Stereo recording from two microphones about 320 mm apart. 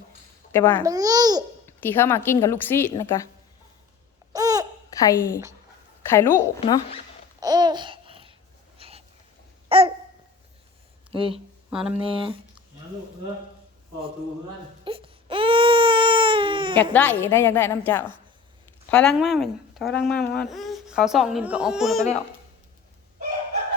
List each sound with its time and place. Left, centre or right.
0.5 s a woman's voice: centre
0.9 s babbling: centre
1.6 s a woman's voice: centre
4.3 s babbling: centre
4.9 s a woman's voice: centre
6.3 s speech: centre
7.3 s babbling: centre
8.8 s a sound: centre
11.1 s speech: centre
11.7 s speech: centre
12.0 s speech: centre
14.8 s baby cry: centre
16.9 s a woman's voice: centre